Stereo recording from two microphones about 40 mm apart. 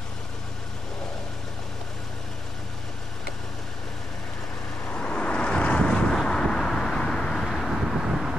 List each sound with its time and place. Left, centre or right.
4.9 s vehicle: left
7.6 s vehicle: centre